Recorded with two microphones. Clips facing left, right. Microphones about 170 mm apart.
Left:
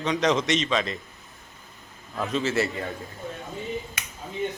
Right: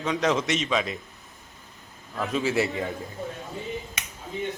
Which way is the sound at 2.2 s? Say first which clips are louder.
Even; 10° right (ahead or behind).